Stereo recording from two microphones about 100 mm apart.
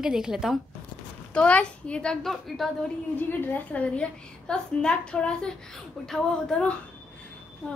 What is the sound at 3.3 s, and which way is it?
A woman's voice, 20° left (ahead or behind).